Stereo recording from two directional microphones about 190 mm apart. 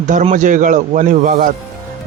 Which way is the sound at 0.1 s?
40° right (ahead or behind).